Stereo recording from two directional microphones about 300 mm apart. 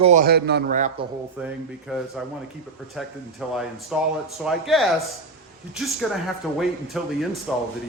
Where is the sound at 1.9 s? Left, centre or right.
Centre.